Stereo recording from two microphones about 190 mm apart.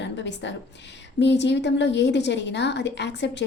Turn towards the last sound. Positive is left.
turn(degrees=65)  # may be behind; listen again after turning